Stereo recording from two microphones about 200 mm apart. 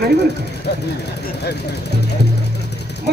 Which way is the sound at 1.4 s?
55° left (ahead or behind).